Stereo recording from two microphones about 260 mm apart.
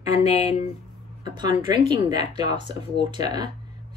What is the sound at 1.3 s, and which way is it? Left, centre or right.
A woman's voice, centre.